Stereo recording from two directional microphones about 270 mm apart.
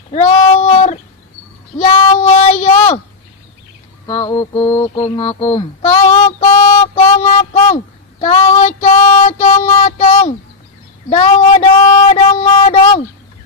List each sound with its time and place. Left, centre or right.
0.1 s child singing: left
4.0 s mantra: centre
6.9 s a sound: left
8.2 s child singing: left
11.1 s speech: left
12.1 s a sound: left